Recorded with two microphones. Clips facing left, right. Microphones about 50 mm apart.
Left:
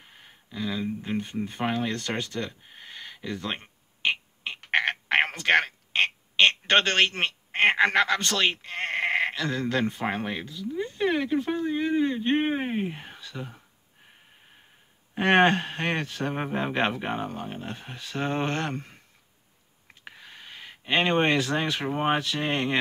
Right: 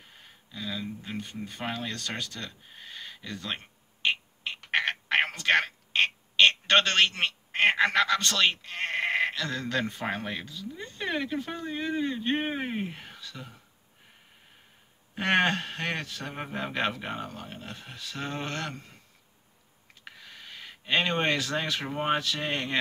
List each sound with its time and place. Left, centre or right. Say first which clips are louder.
0.2 s a sound: left 6 dB; left; by 6.0 s centre
6.7 s a man's voice: left 1 dB; left
15.1 s speech: left 5 dB; left
20.1 s speech: left 1 dB; left